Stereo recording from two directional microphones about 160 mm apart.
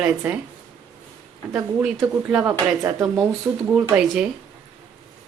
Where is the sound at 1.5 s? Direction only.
5° right (ahead or behind).